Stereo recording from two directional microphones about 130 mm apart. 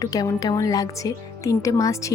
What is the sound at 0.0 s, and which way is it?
Speech, 25° left (ahead or behind).